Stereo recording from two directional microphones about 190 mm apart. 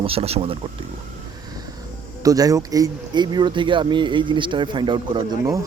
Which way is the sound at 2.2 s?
20° right (ahead or behind).